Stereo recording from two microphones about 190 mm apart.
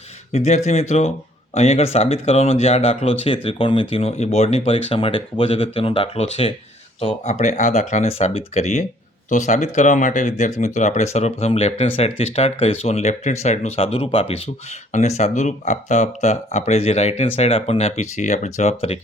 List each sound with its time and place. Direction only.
0.3 s speech: 35° left (ahead or behind)